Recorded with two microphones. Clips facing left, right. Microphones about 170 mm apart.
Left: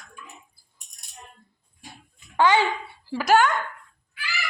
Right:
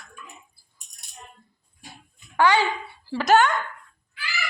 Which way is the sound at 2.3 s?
20° left (ahead or behind).